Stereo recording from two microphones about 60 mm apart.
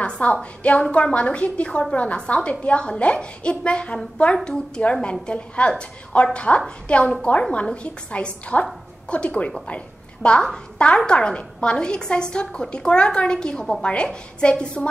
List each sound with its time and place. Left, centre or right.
0.0 s a woman's voice: centre